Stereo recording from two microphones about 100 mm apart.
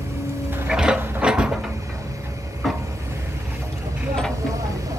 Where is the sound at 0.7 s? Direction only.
10° right (ahead or behind).